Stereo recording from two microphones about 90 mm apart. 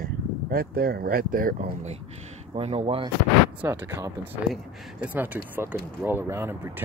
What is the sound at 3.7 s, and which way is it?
Speech, 30° right (ahead or behind).